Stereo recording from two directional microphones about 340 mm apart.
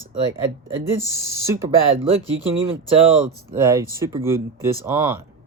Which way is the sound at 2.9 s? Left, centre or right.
Centre.